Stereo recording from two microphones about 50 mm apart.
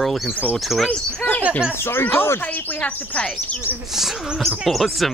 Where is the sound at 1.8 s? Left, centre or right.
Left.